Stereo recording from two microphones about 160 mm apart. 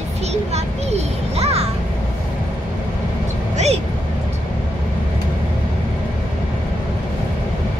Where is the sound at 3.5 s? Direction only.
40° right (ahead or behind).